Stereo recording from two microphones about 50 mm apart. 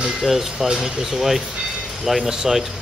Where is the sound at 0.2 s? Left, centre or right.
Centre.